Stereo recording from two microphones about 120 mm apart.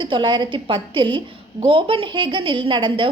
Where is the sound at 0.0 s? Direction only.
40° right (ahead or behind).